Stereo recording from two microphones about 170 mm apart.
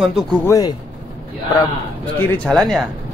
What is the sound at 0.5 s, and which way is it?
Speech, 20° left (ahead or behind).